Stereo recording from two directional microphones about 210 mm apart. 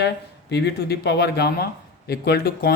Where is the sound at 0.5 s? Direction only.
50° left (ahead or behind).